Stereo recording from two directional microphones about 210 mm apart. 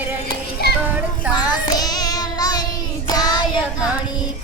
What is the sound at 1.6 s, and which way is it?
Child singing, 20° left (ahead or behind).